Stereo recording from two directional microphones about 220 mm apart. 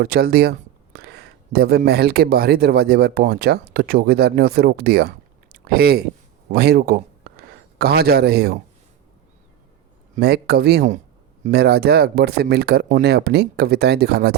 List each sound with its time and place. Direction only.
0.0 s a man's voice: 45° right (ahead or behind)
10.2 s speech: 45° right (ahead or behind)